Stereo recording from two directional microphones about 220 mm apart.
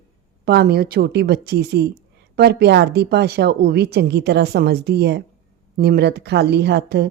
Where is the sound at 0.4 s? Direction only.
45° right (ahead or behind).